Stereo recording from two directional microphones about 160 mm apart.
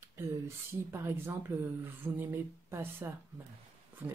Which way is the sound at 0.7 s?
15° right (ahead or behind).